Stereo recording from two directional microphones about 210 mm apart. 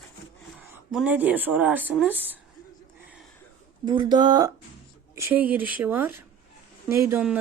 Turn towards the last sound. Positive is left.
turn(degrees=-10)  # may be behind; listen again after turning